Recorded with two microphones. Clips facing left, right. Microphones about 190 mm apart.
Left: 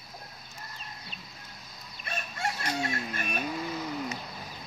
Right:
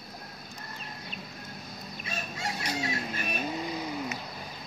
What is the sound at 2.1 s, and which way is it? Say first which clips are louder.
Chicken: left 2 dB; 55° left (ahead or behind).